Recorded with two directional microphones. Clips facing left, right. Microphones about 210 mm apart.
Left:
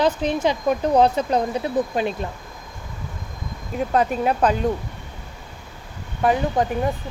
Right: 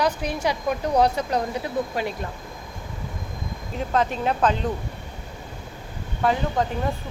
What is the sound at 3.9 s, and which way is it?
Speech, 10° left (ahead or behind).